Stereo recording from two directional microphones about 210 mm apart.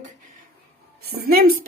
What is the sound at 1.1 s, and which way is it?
Speech, 45° right (ahead or behind).